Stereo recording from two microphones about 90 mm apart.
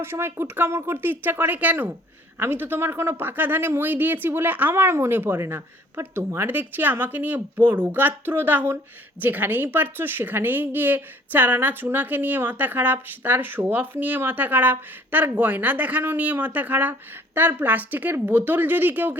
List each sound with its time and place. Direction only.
0.0 s speech: 25° right (ahead or behind)